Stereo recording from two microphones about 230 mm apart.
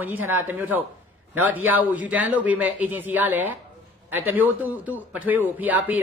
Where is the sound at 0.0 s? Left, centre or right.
Centre.